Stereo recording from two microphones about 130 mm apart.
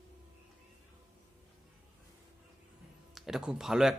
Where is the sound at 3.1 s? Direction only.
5° right (ahead or behind).